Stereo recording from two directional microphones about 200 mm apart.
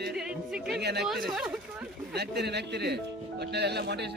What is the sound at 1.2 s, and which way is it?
Speech, 5° right (ahead or behind).